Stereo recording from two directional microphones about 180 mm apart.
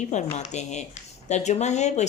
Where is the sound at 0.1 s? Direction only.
40° left (ahead or behind).